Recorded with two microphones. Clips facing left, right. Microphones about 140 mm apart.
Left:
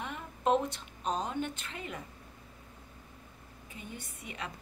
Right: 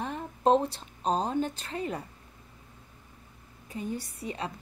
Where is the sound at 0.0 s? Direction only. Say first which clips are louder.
Right 6 dB; 35° right (ahead or behind).